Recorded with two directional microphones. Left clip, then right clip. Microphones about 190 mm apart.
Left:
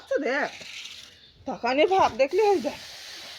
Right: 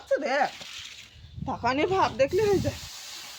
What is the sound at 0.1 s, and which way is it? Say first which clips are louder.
Speech: right 1 dB; 50° right (ahead or behind).